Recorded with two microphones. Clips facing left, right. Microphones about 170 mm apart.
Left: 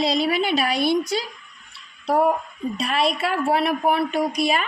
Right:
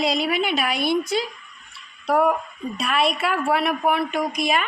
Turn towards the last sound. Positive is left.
turn(degrees=35)  # may be behind; listen again after turning